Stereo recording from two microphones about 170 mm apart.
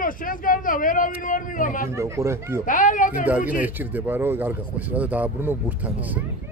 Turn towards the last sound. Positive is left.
turn(degrees=-10)  # may be behind; listen again after turning